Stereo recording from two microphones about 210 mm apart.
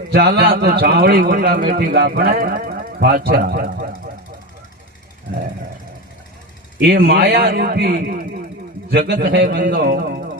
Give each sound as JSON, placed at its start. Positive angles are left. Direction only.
{"t": 0.1, "sound": "a man's voice", "side_deg": -50}
{"t": 6.8, "sound": "a man's voice", "side_deg": -50}